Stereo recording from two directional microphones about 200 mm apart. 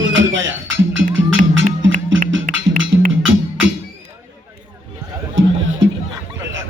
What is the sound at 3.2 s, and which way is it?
Music, 75° right (ahead or behind).